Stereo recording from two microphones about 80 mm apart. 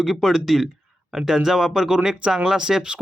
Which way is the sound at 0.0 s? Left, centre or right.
Centre.